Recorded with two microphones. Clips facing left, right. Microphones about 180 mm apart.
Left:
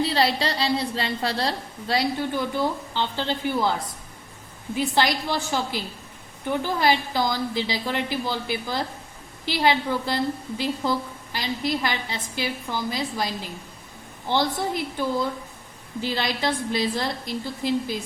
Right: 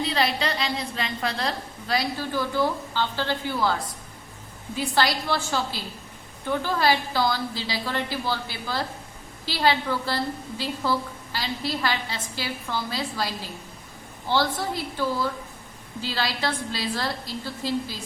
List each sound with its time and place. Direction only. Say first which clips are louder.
0.0 s a woman's voice: left 3 dB; 30° left (ahead or behind)